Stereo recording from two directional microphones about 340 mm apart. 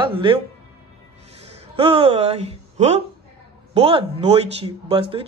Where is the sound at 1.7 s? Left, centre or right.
Centre.